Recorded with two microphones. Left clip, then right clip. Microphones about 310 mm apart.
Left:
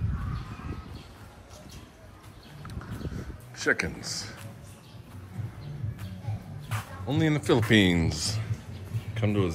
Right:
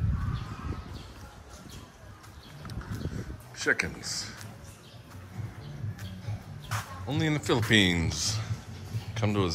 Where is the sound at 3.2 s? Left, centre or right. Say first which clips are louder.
Even; centre.